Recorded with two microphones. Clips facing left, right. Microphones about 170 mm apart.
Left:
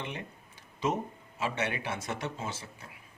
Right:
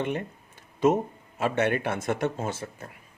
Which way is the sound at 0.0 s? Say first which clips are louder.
Right 10 dB; 50° right (ahead or behind).